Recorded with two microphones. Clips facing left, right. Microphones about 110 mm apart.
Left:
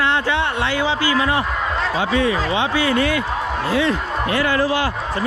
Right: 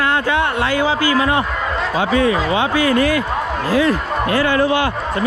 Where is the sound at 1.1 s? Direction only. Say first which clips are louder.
Right 2 dB; 30° right (ahead or behind).